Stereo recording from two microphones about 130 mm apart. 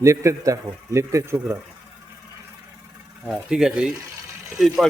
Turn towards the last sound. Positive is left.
turn(degrees=0)  # may be behind; listen again after turning